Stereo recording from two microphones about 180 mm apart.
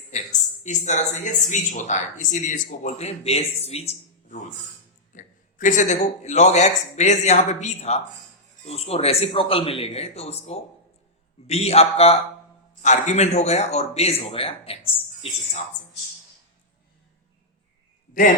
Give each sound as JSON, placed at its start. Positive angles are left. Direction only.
{"t": 0.6, "sound": "speech", "side_deg": 40}